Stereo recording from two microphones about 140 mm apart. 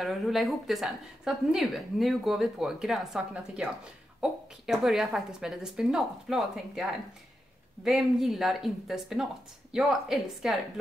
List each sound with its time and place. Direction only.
0.0 s a woman's voice: centre (ahead or behind)